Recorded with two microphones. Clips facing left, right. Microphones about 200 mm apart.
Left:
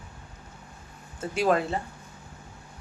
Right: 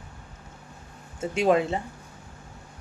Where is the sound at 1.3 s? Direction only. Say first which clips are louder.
Right 2 dB; 20° right (ahead or behind).